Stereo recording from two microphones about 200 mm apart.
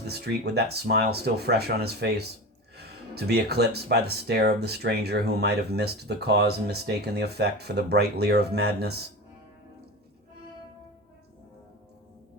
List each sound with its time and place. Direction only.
0.1 s speech: 55° right (ahead or behind)